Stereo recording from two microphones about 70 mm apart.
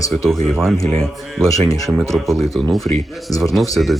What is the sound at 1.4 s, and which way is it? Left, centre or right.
Speech, left.